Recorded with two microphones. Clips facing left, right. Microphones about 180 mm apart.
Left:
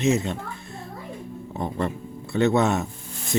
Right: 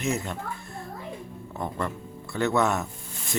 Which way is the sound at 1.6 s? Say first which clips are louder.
Left 4 dB; 25° left (ahead or behind).